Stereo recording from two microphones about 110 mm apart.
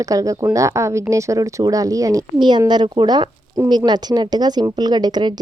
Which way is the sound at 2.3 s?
45° right (ahead or behind).